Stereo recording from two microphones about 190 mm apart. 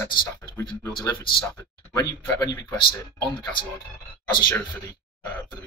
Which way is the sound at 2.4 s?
20° left (ahead or behind).